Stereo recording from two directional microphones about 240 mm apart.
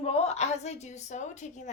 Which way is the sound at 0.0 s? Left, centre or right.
Left.